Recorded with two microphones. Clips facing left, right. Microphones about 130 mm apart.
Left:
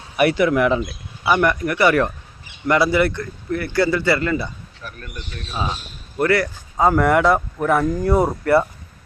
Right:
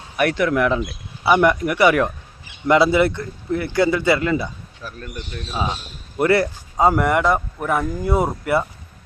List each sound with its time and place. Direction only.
0.2 s speech: 5° left (ahead or behind)
1.2 s speech: 15° right (ahead or behind)
2.6 s speech: 20° right (ahead or behind)
6.1 s speech: 25° right (ahead or behind)
7.0 s speech: centre (ahead or behind)